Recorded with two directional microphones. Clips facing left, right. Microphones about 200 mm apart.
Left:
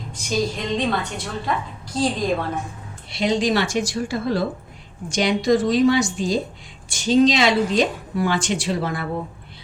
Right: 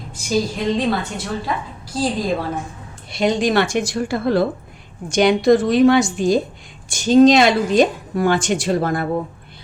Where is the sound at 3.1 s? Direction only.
50° right (ahead or behind).